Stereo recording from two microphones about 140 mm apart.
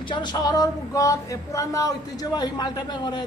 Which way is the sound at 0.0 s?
35° left (ahead or behind).